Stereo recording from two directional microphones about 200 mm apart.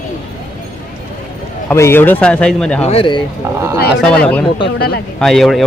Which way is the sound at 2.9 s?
25° left (ahead or behind).